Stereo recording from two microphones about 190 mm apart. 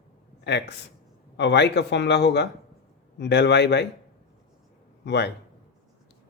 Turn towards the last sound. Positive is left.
turn(degrees=60)  # may be behind; listen again after turning